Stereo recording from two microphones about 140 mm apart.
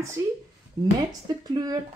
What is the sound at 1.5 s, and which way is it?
Speech, 30° right (ahead or behind).